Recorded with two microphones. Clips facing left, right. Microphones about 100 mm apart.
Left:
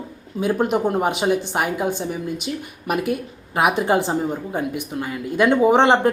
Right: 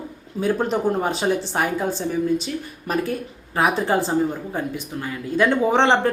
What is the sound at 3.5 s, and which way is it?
Speech, 15° left (ahead or behind).